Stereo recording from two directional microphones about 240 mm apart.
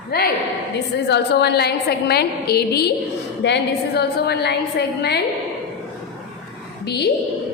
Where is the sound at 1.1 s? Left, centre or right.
Left.